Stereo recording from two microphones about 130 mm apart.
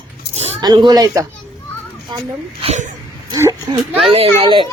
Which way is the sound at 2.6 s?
50° right (ahead or behind).